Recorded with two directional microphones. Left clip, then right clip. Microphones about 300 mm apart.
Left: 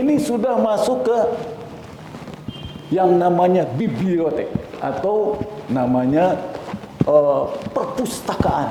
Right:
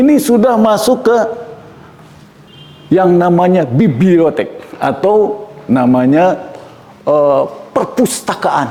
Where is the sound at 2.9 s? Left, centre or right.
Right.